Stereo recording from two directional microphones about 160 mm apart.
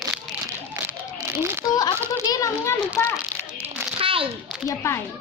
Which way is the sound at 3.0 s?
15° left (ahead or behind).